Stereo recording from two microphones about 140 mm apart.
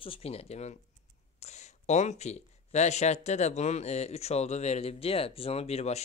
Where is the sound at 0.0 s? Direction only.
45° left (ahead or behind).